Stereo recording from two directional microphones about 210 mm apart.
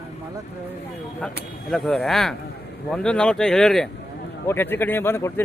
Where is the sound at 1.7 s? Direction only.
5° left (ahead or behind).